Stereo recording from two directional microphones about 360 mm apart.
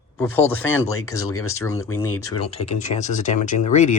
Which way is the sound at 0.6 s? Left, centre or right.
Left.